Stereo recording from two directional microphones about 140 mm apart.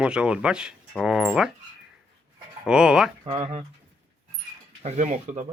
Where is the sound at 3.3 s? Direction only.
50° right (ahead or behind).